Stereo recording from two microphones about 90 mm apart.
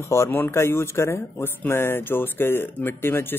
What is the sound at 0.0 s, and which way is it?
Speech, 30° left (ahead or behind).